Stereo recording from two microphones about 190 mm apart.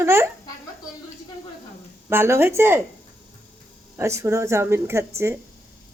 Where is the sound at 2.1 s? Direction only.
15° right (ahead or behind).